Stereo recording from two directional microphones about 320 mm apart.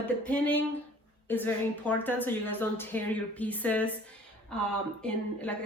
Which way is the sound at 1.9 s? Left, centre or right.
Centre.